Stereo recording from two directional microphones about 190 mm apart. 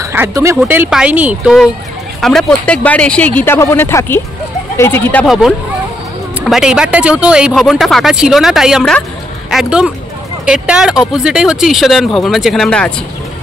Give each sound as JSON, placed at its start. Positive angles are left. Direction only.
{"t": 0.0, "sound": "speech", "side_deg": -15}
{"t": 5.2, "sound": "speech", "side_deg": 0}